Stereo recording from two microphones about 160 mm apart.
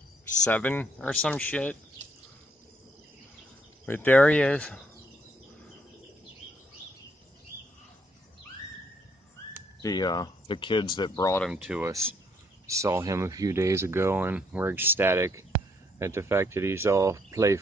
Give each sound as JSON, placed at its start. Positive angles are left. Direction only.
{"t": 0.4, "sound": "speech", "side_deg": 10}
{"t": 3.8, "sound": "speech", "side_deg": 10}
{"t": 9.8, "sound": "speech", "side_deg": 25}
{"t": 11.5, "sound": "speech", "side_deg": -5}
{"t": 12.6, "sound": "speech", "side_deg": -20}